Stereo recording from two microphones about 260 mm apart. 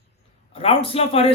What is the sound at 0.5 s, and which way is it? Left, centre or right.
Speech, left.